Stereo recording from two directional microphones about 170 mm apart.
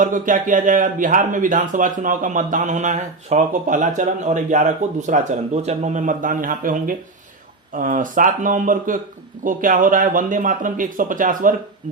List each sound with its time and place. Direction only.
0.0 s speech: 50° right (ahead or behind)